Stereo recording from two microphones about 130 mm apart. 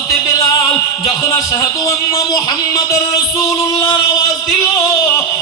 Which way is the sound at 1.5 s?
30° left (ahead or behind).